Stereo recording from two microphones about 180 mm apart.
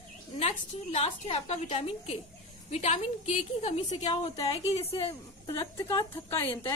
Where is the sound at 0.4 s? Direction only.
35° left (ahead or behind).